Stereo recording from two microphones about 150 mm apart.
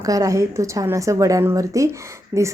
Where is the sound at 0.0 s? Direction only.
25° right (ahead or behind).